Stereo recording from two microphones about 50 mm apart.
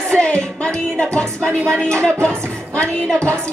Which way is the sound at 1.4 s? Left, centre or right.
Right.